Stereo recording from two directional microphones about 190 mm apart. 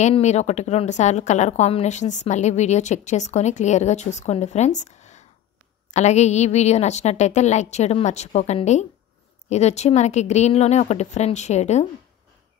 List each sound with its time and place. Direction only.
0.0 s a woman's voice: 35° left (ahead or behind)